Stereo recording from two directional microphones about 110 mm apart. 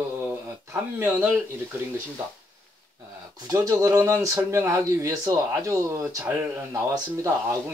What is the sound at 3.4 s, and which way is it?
Speech, 30° right (ahead or behind).